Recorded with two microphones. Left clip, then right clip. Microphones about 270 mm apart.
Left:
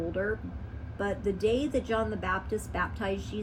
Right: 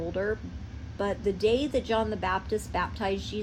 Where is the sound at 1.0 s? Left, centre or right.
Right.